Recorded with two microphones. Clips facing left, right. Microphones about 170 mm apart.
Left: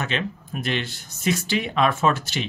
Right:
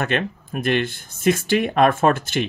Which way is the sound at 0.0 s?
55° right (ahead or behind).